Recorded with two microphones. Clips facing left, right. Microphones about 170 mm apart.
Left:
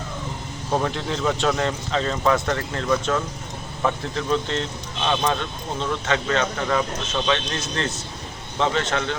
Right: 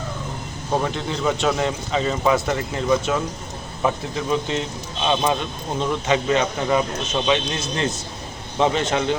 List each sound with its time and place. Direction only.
0.8 s speech: 5° right (ahead or behind)